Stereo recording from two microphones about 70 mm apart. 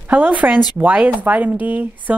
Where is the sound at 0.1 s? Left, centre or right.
Right.